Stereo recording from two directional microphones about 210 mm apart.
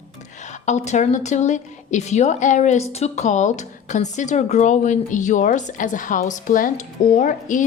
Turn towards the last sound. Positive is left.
turn(degrees=35)  # may be behind; listen again after turning